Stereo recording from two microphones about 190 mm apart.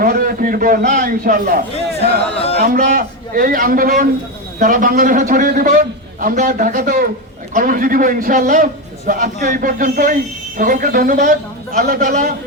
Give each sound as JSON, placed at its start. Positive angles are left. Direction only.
{"t": 0.0, "sound": "a man's voice", "side_deg": -50}